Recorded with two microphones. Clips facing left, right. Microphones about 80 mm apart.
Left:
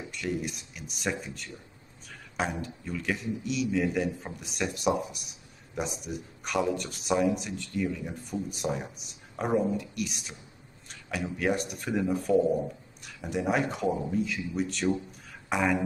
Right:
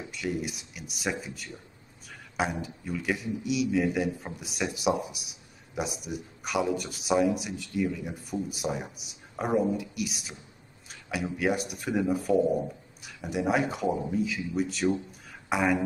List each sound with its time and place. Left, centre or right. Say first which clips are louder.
0.1 s speech: right 1 dB; centre
10.9 s a sound: right 1 dB; centre
11.3 s speech: even; centre